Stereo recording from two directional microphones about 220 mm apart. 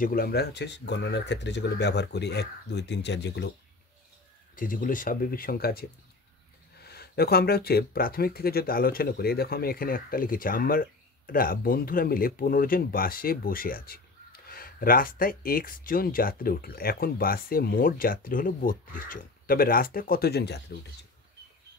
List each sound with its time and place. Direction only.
0.0 s speech: 45° left (ahead or behind)
4.6 s speech: 40° left (ahead or behind)